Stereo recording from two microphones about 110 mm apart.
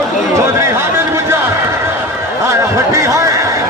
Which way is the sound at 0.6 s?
25° right (ahead or behind).